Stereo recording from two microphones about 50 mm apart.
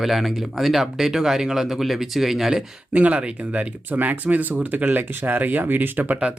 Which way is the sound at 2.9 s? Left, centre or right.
Right.